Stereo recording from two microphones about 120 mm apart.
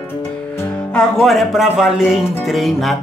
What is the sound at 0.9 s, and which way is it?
Speech, 5° left (ahead or behind).